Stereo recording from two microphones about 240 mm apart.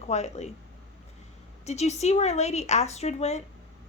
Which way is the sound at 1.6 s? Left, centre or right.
Left.